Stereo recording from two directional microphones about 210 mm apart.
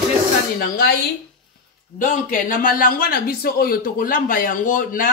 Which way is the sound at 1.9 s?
40° left (ahead or behind).